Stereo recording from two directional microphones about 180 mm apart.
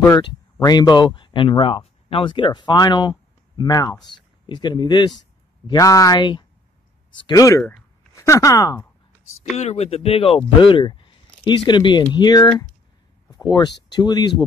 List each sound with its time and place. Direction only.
0.1 s speech: 20° left (ahead or behind)
9.6 s speech: 35° left (ahead or behind)
13.8 s speech: 25° left (ahead or behind)